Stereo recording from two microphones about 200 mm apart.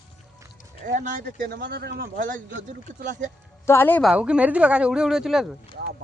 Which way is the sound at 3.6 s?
10° left (ahead or behind).